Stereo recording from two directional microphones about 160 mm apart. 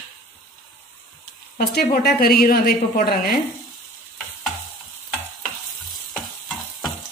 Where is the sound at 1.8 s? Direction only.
75° left (ahead or behind).